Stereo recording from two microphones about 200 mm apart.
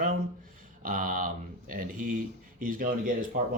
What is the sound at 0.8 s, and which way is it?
Speech, 45° right (ahead or behind).